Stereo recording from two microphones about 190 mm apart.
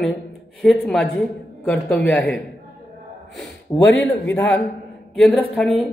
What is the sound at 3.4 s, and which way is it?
Speech, 5° left (ahead or behind).